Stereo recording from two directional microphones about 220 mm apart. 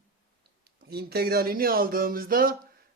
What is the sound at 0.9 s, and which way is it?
Speech, 45° right (ahead or behind).